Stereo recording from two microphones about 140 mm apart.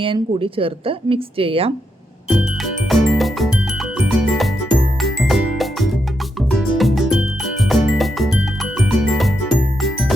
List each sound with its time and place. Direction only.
0.0 s a woman's voice: 40° right (ahead or behind)
2.9 s music: centre (ahead or behind)